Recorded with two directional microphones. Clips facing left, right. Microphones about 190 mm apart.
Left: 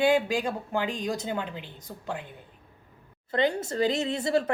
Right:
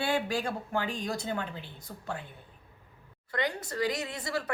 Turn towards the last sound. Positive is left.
turn(degrees=25)  # may be behind; listen again after turning